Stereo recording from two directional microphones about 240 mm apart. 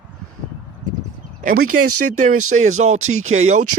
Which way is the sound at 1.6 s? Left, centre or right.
Right.